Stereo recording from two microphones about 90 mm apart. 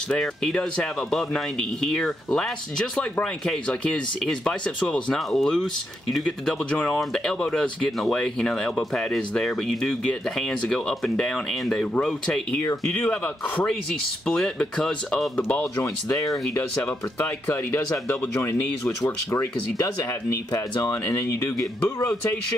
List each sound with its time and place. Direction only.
0.2 s speech: 5° left (ahead or behind)
6.9 s speech: 5° left (ahead or behind)
12.8 s speech: 20° left (ahead or behind)
14.2 s speech: 5° left (ahead or behind)
15.8 s speech: 35° left (ahead or behind)
17.2 s speech: 20° left (ahead or behind)